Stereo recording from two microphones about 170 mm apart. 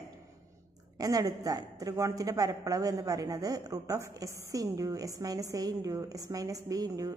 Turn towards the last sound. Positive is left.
turn(degrees=-20)  # may be behind; listen again after turning